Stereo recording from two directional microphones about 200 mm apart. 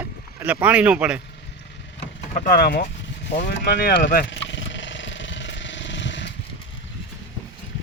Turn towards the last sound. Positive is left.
turn(degrees=65)  # may be behind; listen again after turning